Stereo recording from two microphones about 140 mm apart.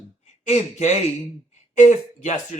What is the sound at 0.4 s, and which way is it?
Speech, 55° left (ahead or behind).